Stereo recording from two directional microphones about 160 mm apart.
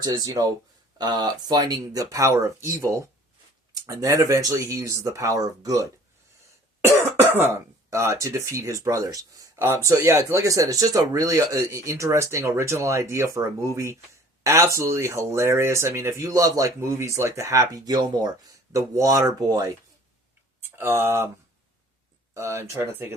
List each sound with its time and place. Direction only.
0.0 s speech: 25° right (ahead or behind)
6.8 s speech: 15° right (ahead or behind)
22.4 s speech: 20° right (ahead or behind)